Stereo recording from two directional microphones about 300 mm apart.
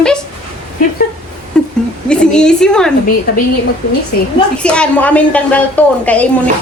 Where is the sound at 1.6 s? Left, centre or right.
Centre.